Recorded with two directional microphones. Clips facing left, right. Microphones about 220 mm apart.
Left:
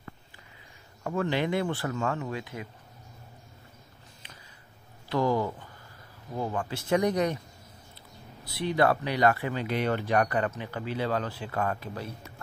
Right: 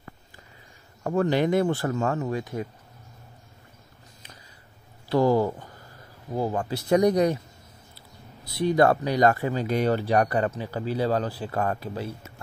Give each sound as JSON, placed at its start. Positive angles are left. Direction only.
{"t": 1.0, "sound": "speech", "side_deg": -40}
{"t": 5.1, "sound": "speech", "side_deg": -35}
{"t": 8.5, "sound": "speech", "side_deg": -40}